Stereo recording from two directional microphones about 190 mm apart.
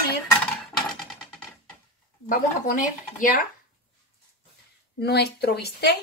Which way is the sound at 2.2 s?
45° left (ahead or behind).